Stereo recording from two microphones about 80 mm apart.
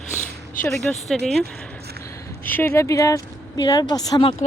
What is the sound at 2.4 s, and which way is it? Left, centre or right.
Speech, left.